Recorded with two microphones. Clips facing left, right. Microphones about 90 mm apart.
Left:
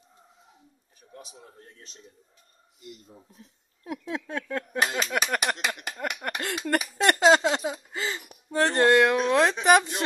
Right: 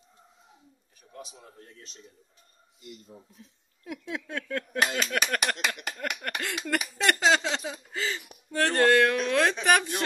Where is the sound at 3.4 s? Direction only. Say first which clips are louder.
Left 1 dB; 40° left (ahead or behind); by 6.4 s 20° left (ahead or behind).